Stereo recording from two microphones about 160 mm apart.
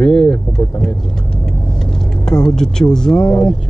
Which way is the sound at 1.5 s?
Centre (ahead or behind).